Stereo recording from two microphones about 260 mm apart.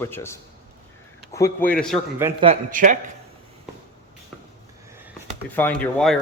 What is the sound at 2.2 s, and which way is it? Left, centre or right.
Speech, centre.